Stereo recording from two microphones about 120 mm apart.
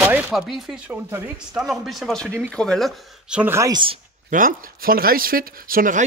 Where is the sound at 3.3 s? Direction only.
15° right (ahead or behind).